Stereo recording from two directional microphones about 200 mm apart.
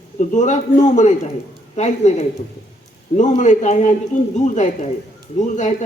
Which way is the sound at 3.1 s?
35° left (ahead or behind).